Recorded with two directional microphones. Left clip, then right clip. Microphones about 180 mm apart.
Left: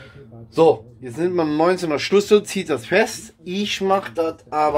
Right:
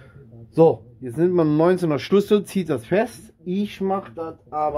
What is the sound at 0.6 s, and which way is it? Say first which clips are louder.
Speech: left 1 dB; 50° right (ahead or behind).